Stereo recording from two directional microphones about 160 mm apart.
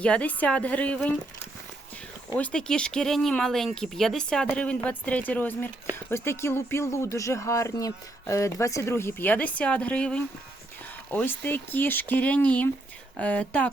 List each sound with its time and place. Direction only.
0.0 s speech: 10° left (ahead or behind)
2.3 s speech: 5° left (ahead or behind)